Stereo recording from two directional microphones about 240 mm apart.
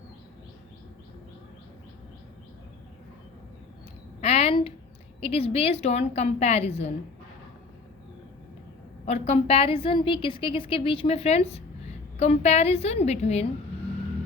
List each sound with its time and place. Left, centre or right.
4.2 s a sound: left
5.2 s a woman's voice: left
9.0 s a woman's voice: left